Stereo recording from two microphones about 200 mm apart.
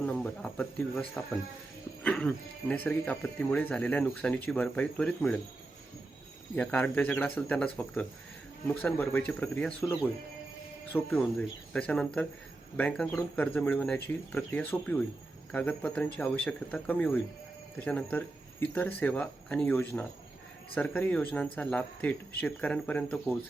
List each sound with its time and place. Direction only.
0.0 s speech: 5° left (ahead or behind)
2.0 s speech: 5° left (ahead or behind)
6.6 s speech: 10° left (ahead or behind)